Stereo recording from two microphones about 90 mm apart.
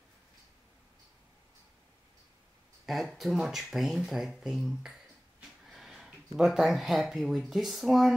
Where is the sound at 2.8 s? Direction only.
Centre (ahead or behind).